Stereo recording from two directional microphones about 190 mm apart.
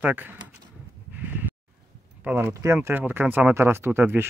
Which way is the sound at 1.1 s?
10° right (ahead or behind).